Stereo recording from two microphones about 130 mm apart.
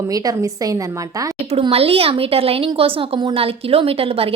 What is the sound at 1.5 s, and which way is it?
A woman's voice, 50° right (ahead or behind).